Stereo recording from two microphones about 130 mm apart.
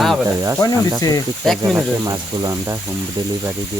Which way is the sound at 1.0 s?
30° left (ahead or behind).